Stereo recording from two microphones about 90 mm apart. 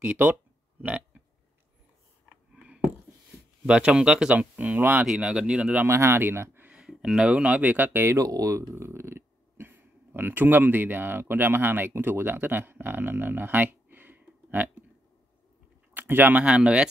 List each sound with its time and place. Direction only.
0.0 s speech: 15° right (ahead or behind)
2.2 s a sound: 10° right (ahead or behind)
3.6 s speech: 10° right (ahead or behind)
5.0 s speech: 5° right (ahead or behind)
5.9 s speech: 30° right (ahead or behind)
6.7 s a sound: 5° right (ahead or behind)
7.3 s speech: 15° right (ahead or behind)
15.9 s speech: 20° right (ahead or behind)